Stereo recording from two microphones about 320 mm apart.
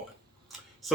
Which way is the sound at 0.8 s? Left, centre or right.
Centre.